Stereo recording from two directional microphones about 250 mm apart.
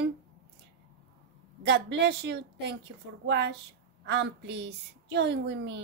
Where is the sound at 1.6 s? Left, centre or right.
Right.